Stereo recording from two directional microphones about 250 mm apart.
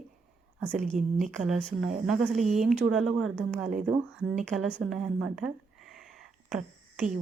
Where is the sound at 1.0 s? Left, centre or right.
Right.